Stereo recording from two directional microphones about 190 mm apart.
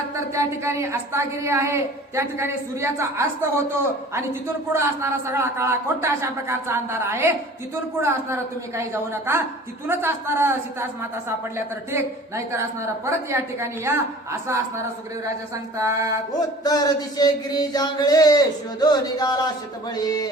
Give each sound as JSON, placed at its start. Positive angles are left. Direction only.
{"t": 0.3, "sound": "a man's voice", "side_deg": -15}
{"t": 16.6, "sound": "speech", "side_deg": 20}